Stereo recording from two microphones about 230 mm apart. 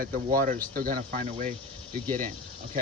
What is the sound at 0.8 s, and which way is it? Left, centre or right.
Speech, right.